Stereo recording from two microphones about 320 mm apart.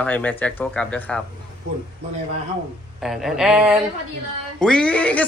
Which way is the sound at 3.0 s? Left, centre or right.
Centre.